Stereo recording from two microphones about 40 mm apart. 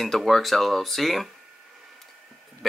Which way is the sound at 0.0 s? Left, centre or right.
Centre.